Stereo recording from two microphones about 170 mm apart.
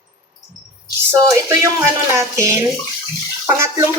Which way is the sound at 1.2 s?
20° right (ahead or behind).